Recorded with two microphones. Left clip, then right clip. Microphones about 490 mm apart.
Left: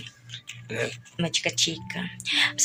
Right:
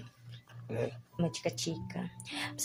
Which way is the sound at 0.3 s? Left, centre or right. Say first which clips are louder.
Left 8 dB; right.